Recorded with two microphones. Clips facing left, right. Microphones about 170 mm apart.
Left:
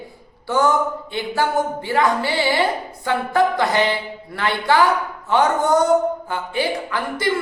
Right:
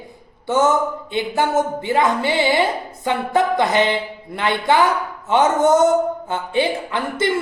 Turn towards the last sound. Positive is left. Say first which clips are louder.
# right 2 dB
turn(degrees=-25)  # may be behind; listen again after turning